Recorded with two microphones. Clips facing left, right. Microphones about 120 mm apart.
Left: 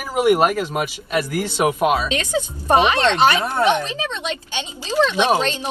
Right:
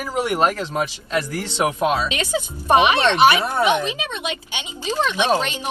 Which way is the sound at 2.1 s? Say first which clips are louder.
Left 2 dB; 15° right (ahead or behind).